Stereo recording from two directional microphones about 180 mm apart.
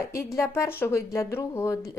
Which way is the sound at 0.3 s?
15° left (ahead or behind).